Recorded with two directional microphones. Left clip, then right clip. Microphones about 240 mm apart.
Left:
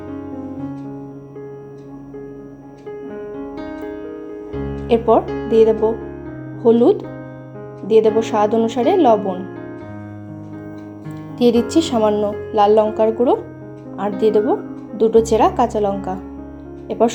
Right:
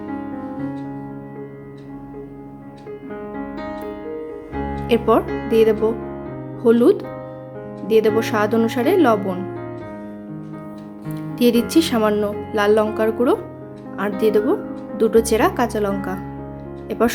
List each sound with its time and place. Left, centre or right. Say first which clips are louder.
4.9 s speech: left 3 dB; centre
11.3 s speech: left 2 dB; centre